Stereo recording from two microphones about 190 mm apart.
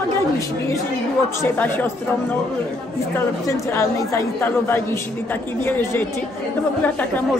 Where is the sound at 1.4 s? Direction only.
10° left (ahead or behind).